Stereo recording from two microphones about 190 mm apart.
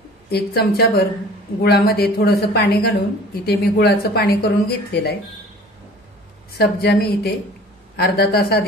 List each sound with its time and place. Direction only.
0.3 s speech: 55° left (ahead or behind)
6.6 s speech: 55° left (ahead or behind)